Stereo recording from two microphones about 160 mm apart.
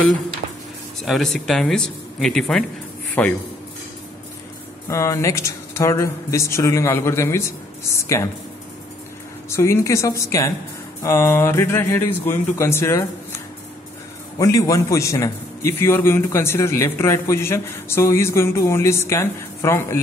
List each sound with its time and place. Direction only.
1.0 s a man's voice: centre (ahead or behind)
4.8 s a man's voice: 20° left (ahead or behind)
9.5 s a man's voice: 15° left (ahead or behind)
14.4 s a man's voice: 20° left (ahead or behind)